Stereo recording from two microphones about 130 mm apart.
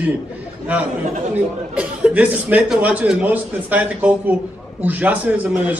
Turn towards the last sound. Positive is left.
turn(degrees=-10)  # may be behind; listen again after turning